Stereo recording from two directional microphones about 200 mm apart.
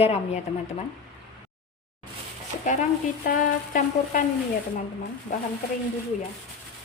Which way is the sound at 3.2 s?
40° left (ahead or behind).